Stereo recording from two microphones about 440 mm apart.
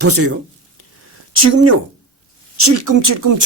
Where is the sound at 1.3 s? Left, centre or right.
Right.